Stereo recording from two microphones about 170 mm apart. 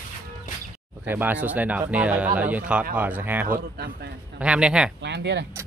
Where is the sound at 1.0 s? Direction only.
10° right (ahead or behind).